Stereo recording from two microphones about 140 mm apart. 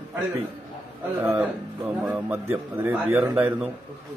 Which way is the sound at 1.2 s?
10° right (ahead or behind).